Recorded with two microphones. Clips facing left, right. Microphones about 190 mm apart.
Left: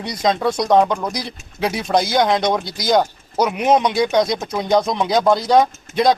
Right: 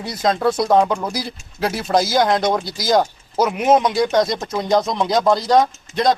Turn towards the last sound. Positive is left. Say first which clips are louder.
# left 2 dB
turn(degrees=0)  # may be behind; listen again after turning